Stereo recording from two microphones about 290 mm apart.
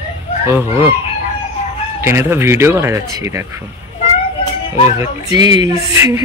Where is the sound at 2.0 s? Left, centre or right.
Centre.